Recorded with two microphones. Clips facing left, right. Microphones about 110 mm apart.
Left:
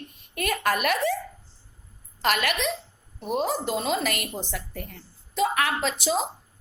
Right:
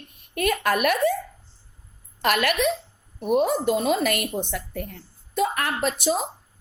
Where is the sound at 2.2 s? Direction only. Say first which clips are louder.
Right 3 dB; 50° right (ahead or behind).